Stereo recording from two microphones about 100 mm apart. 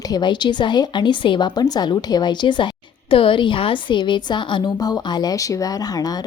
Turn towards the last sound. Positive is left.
turn(degrees=40)  # may be behind; listen again after turning